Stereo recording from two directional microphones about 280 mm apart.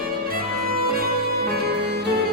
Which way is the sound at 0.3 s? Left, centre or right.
Right.